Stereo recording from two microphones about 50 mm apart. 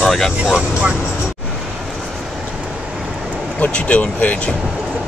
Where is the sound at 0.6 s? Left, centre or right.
Right.